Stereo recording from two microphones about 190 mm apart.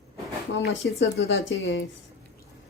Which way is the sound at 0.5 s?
75° left (ahead or behind).